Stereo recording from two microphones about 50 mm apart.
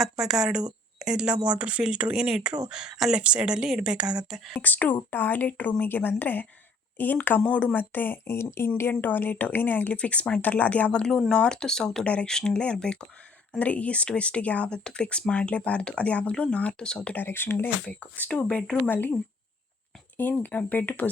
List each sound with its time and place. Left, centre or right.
0.0 s a woman's voice: centre
4.5 s speech: left
8.4 s speech: left
8.9 s speech: left
9.9 s speech: left
11.3 s speech: centre
12.0 s speech: left
13.6 s speech: left
17.2 s speech: left
17.8 s speech: left
18.9 s speech: left
20.3 s speech: left